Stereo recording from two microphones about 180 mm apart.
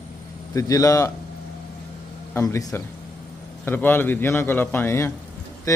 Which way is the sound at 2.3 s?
15° left (ahead or behind).